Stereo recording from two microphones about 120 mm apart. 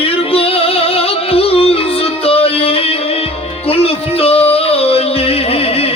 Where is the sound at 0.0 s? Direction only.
55° left (ahead or behind).